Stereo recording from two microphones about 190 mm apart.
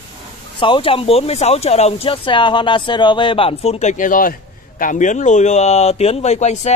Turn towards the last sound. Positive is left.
turn(degrees=35)  # may be behind; listen again after turning